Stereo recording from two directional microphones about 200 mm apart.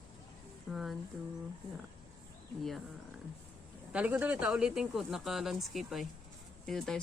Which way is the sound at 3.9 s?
5° right (ahead or behind).